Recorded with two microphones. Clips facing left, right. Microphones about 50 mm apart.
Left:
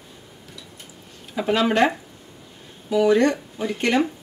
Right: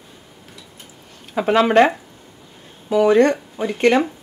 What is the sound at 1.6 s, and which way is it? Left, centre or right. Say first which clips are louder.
Speech: right 5 dB; right.